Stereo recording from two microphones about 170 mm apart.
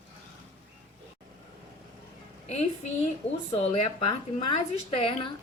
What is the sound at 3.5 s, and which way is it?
A woman's voice, 40° left (ahead or behind).